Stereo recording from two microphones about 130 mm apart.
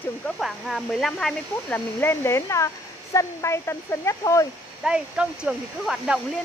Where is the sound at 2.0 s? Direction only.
20° left (ahead or behind).